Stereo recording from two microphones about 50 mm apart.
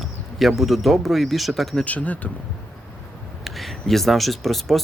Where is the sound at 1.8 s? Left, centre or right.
Left.